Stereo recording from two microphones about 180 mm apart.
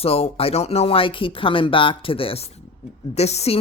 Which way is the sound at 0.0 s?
35° left (ahead or behind).